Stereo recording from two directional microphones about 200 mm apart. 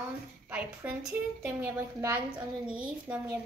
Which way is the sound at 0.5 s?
5° right (ahead or behind).